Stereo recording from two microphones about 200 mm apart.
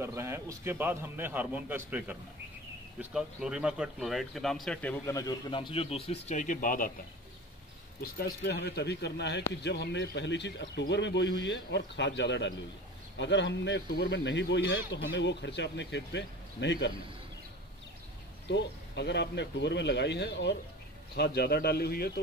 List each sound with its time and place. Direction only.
0.0 s a man's voice: 15° right (ahead or behind); by 6.9 s 40° left (ahead or behind)
8.0 s a man's voice: 55° left (ahead or behind)
18.5 s a man's voice: 60° left (ahead or behind)